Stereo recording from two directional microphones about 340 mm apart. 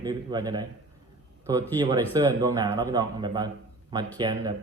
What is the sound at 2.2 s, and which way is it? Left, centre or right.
A man's voice, centre.